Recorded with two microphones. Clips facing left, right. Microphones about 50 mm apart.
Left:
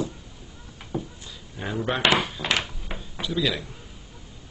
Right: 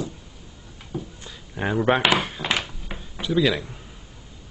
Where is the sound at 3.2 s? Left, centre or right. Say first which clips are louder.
Right 5 dB; right.